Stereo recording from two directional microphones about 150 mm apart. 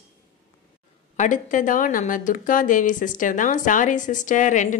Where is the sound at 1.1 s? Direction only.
55° left (ahead or behind).